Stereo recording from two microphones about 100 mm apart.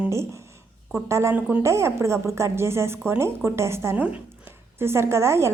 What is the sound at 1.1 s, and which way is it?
Speech, 30° right (ahead or behind).